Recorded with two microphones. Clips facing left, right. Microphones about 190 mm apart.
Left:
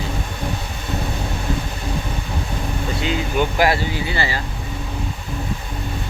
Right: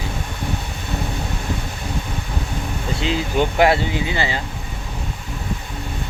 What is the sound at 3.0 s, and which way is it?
Speech, 30° right (ahead or behind).